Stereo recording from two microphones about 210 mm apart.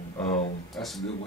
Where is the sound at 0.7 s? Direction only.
Centre (ahead or behind).